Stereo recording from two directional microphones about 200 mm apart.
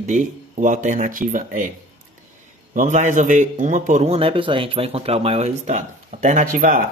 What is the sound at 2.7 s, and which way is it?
A man's voice, 40° right (ahead or behind).